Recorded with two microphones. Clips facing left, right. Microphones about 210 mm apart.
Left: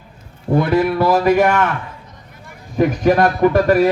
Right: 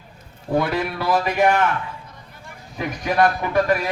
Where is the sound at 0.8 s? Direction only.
40° left (ahead or behind).